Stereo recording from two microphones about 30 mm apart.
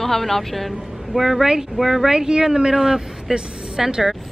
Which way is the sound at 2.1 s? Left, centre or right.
Right.